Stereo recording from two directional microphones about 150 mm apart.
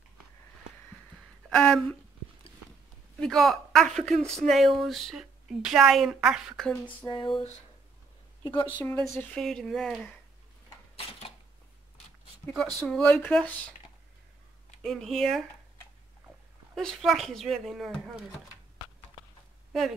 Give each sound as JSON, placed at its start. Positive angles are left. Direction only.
{"t": 1.5, "sound": "a woman's voice", "side_deg": 5}
{"t": 3.2, "sound": "a woman's voice", "side_deg": 0}
{"t": 7.1, "sound": "a sound", "side_deg": 30}
{"t": 8.8, "sound": "a woman's voice", "side_deg": 10}
{"t": 12.4, "sound": "a woman's voice", "side_deg": 5}
{"t": 14.8, "sound": "a woman's voice", "side_deg": 0}
{"t": 16.7, "sound": "a woman's voice", "side_deg": 0}